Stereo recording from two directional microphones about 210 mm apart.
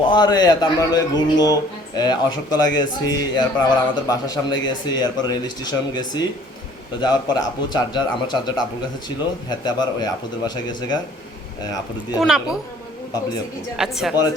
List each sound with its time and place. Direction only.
0.1 s speech: 20° left (ahead or behind)
12.2 s a woman's voice: centre (ahead or behind)
13.7 s a woman's voice: centre (ahead or behind)